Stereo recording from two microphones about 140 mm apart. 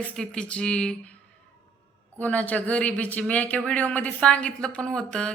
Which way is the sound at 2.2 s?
10° left (ahead or behind).